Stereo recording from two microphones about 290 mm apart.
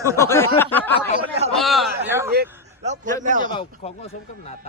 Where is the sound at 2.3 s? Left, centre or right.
Right.